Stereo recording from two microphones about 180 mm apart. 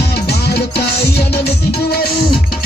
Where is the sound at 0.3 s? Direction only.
65° left (ahead or behind).